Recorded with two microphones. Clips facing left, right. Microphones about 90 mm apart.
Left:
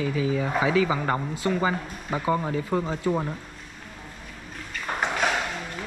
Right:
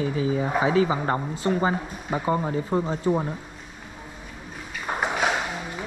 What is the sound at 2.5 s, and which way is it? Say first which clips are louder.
Speech: right 1 dB; 25° right (ahead or behind).